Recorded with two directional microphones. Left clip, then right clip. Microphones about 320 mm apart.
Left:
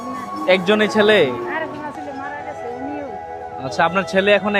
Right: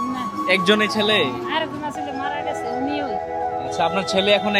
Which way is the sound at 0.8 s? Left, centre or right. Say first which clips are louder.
Left 5 dB; centre.